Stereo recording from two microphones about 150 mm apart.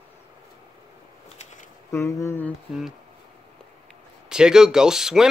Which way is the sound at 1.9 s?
20° left (ahead or behind).